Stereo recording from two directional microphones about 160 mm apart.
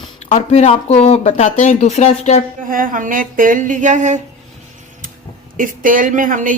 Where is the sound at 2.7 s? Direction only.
60° right (ahead or behind).